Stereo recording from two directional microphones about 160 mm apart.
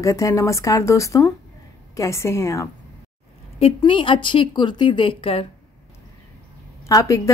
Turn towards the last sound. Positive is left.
turn(degrees=20)  # may be behind; listen again after turning